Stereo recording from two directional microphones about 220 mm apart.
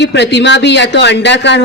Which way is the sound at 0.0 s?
50° left (ahead or behind).